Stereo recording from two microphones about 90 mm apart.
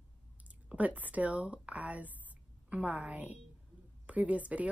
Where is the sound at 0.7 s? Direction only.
15° right (ahead or behind).